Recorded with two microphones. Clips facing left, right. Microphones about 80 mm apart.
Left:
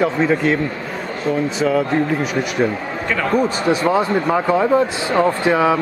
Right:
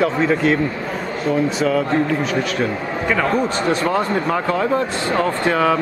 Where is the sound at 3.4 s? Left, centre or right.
Centre.